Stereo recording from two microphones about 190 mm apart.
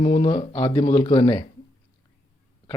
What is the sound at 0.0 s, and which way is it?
Speech, 30° left (ahead or behind).